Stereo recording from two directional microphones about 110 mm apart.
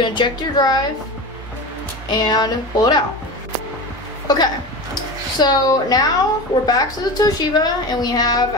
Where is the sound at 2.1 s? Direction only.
40° left (ahead or behind).